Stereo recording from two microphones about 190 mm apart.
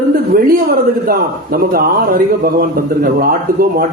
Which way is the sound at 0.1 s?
50° right (ahead or behind).